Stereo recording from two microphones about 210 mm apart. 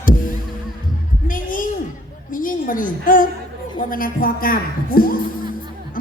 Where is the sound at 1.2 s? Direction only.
40° left (ahead or behind).